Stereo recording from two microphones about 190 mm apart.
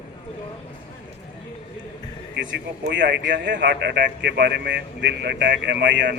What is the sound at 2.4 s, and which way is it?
A man's voice, 70° right (ahead or behind).